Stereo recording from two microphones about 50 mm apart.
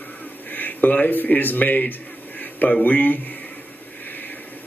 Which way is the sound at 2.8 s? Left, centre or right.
Left.